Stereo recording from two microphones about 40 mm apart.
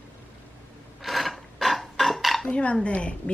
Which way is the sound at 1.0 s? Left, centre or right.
Centre.